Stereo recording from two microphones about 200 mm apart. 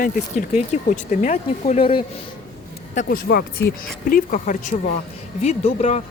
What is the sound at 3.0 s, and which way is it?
Speech, 50° left (ahead or behind).